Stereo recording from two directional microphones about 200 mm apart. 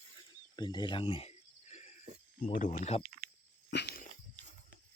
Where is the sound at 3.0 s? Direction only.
50° right (ahead or behind).